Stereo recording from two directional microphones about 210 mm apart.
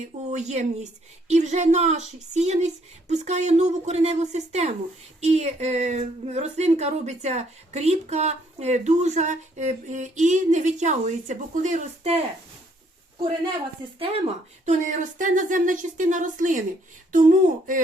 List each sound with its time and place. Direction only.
0.3 s speech: 35° right (ahead or behind)
14.6 s speech: 35° right (ahead or behind)